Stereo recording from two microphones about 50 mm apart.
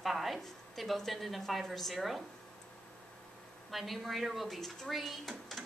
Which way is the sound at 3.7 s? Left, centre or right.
Centre.